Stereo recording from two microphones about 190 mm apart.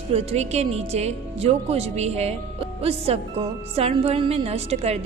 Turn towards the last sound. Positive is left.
turn(degrees=-35)  # may be behind; listen again after turning